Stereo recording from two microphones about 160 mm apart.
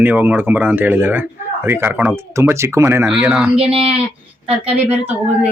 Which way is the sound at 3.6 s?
35° right (ahead or behind).